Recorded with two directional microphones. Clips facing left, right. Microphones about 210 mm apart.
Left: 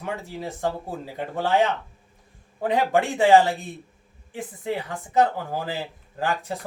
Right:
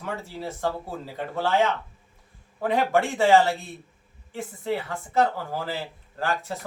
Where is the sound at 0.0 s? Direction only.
15° left (ahead or behind).